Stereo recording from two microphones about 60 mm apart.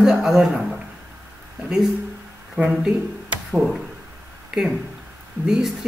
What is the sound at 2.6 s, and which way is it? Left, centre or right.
Speech, right.